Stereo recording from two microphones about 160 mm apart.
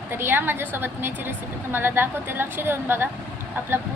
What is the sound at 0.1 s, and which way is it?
A woman's voice, 15° right (ahead or behind).